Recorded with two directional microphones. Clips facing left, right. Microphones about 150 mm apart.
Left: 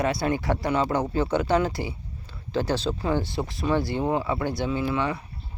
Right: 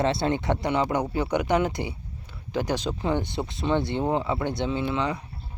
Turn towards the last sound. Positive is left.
turn(degrees=-20)  # may be behind; listen again after turning